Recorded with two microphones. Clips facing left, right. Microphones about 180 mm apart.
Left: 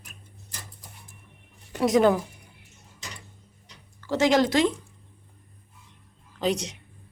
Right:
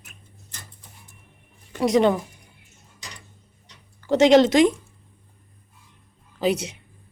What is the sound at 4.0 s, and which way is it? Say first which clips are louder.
Speech: right 6 dB; 20° right (ahead or behind).